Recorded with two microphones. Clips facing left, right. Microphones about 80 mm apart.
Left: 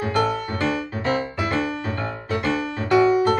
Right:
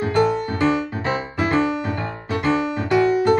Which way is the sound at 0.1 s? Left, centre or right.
Right.